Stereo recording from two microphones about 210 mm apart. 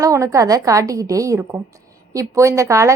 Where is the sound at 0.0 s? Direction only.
15° right (ahead or behind).